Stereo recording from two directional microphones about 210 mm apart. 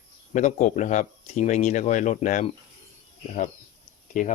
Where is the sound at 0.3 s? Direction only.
35° left (ahead or behind).